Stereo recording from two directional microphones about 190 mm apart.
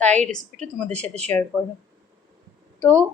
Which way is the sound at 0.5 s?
35° right (ahead or behind).